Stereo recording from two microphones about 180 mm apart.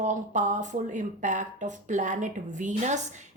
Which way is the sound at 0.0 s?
40° right (ahead or behind).